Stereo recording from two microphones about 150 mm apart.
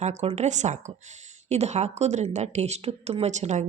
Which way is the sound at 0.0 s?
50° right (ahead or behind).